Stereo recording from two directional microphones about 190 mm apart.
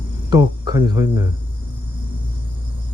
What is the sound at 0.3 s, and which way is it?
Speech, 20° right (ahead or behind).